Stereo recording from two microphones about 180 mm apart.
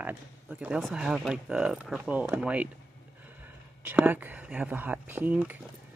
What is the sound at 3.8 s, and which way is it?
Speech, 10° right (ahead or behind).